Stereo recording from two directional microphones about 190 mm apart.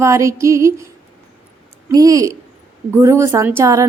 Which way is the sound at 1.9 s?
20° right (ahead or behind).